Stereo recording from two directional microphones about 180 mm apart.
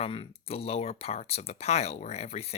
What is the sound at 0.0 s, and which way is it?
Speech, 30° left (ahead or behind).